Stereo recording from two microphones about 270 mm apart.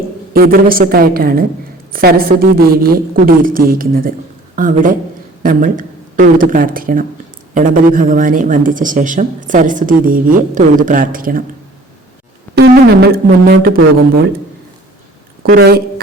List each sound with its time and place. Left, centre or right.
0.3 s a woman's voice: right
12.5 s a woman's voice: right
15.4 s a woman's voice: right